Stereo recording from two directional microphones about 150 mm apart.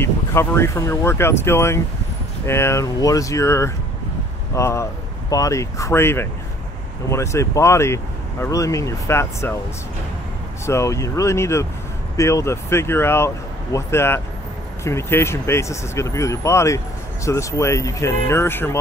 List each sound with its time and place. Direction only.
0.0 s speech: 15° left (ahead or behind)
10.6 s speech: 20° left (ahead or behind)